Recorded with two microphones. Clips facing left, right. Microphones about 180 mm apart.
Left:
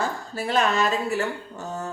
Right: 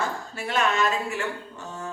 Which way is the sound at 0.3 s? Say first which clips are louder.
Left 2 dB; 35° left (ahead or behind).